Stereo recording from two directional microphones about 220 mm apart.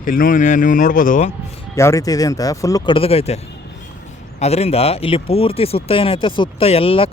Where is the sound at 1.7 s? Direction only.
15° left (ahead or behind).